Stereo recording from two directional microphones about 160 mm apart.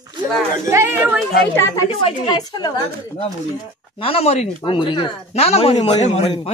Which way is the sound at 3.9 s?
35° left (ahead or behind).